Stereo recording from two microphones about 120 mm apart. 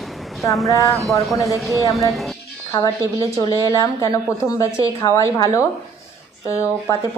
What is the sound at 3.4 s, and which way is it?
A woman's voice, 30° left (ahead or behind).